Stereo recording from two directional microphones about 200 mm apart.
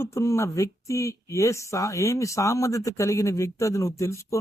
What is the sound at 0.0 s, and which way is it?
A man's voice, 15° left (ahead or behind).